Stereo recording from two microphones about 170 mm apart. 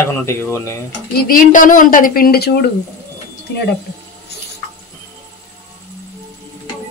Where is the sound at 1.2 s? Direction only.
55° left (ahead or behind).